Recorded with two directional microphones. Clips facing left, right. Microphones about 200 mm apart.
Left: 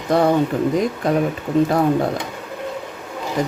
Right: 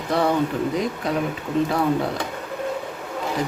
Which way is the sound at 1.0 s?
45° left (ahead or behind).